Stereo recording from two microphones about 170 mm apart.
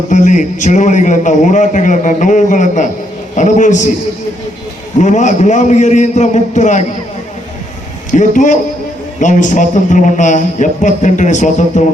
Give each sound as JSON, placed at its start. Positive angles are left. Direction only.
{"t": 0.1, "sound": "a man's voice", "side_deg": 45}
{"t": 4.9, "sound": "a man's voice", "side_deg": 45}
{"t": 8.1, "sound": "a man's voice", "side_deg": 45}